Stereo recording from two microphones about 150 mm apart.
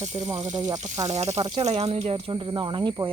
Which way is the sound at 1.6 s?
45° right (ahead or behind).